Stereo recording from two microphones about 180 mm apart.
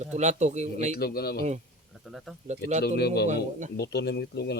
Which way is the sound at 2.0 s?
Centre (ahead or behind).